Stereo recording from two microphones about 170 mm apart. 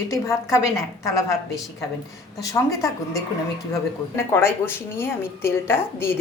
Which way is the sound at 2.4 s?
20° left (ahead or behind).